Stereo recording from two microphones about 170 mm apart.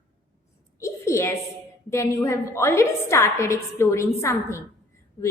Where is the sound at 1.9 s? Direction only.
20° left (ahead or behind).